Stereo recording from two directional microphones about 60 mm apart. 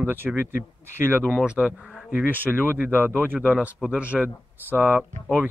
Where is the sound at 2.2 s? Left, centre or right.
Right.